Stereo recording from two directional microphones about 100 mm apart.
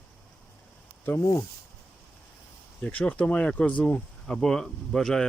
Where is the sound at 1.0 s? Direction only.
20° left (ahead or behind).